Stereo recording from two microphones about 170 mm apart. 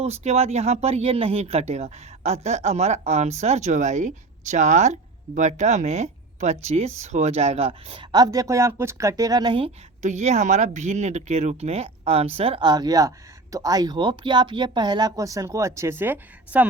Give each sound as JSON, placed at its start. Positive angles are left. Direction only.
{"t": 0.0, "sound": "speech", "side_deg": -40}
{"t": 10.0, "sound": "speech", "side_deg": -45}